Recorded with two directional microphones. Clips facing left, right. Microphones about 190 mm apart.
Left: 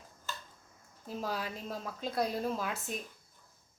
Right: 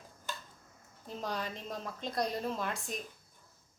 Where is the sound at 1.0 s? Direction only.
5° left (ahead or behind).